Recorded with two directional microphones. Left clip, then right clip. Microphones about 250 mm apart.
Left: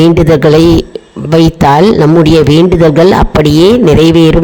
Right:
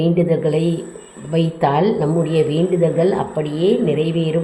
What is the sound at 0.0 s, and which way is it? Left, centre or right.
A man's voice, left.